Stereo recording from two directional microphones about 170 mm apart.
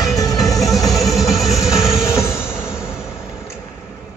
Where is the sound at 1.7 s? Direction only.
15° left (ahead or behind).